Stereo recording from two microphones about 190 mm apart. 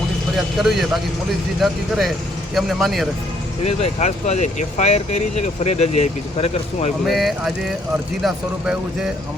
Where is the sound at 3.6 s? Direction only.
35° left (ahead or behind).